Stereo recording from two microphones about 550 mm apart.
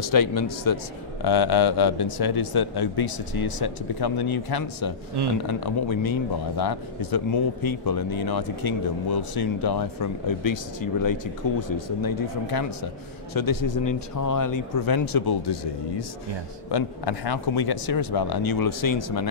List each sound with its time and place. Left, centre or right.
0.1 s speech: left
5.2 s speech: right
5.9 s speech: left